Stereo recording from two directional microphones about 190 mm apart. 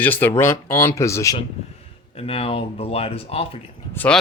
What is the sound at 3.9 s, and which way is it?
Speech, 5° left (ahead or behind).